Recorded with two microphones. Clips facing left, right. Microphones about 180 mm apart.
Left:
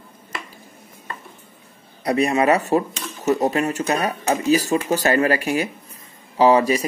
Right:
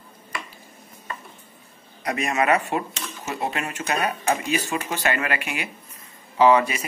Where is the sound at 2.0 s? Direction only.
35° left (ahead or behind).